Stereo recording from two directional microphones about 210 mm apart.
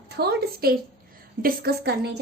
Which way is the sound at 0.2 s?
50° right (ahead or behind).